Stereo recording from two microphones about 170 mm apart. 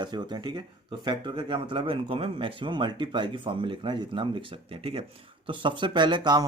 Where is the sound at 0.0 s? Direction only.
25° right (ahead or behind).